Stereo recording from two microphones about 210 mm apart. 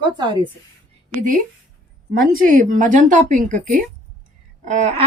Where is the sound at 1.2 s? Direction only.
40° right (ahead or behind).